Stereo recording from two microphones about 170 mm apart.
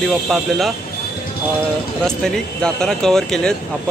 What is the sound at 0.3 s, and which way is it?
Speech, centre (ahead or behind).